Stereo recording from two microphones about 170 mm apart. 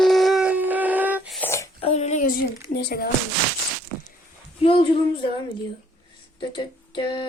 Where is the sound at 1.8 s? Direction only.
40° left (ahead or behind).